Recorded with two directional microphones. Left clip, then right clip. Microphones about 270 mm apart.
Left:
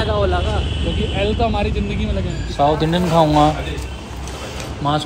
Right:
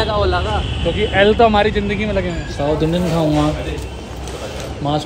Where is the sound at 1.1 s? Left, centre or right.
Right.